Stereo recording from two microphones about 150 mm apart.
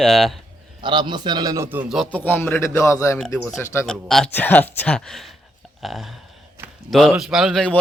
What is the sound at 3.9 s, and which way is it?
A man's voice, 5° left (ahead or behind).